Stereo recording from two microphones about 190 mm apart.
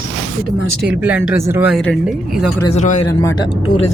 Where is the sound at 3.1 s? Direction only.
15° left (ahead or behind).